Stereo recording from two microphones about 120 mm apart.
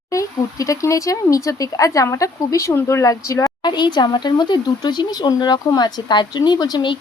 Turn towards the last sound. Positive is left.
turn(degrees=40)  # may be behind; listen again after turning